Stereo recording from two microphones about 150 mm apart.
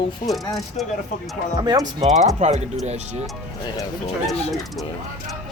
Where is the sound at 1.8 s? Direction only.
50° right (ahead or behind).